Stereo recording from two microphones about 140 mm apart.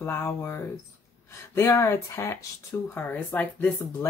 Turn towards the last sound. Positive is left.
turn(degrees=15)  # may be behind; listen again after turning